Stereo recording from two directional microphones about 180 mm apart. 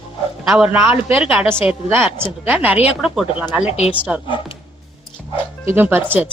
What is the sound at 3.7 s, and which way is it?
Speech, 35° left (ahead or behind).